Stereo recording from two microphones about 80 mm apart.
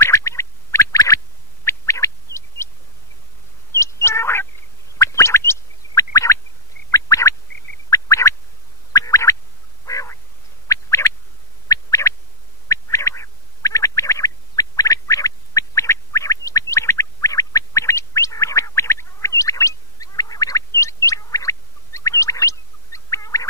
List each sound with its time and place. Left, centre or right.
0.0 s boing: left
3.7 s cat: left
4.9 s gargling: left
6.9 s a sound: left
9.8 s frog: left
10.7 s a sound: left